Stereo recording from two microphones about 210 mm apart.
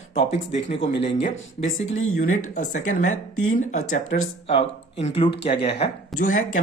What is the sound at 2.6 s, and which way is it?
Speech, 40° left (ahead or behind).